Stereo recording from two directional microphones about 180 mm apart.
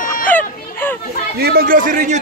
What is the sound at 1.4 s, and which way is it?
Speech, 60° right (ahead or behind).